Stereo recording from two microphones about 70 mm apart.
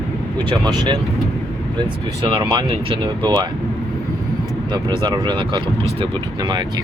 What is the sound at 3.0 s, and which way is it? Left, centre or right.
Speech, right.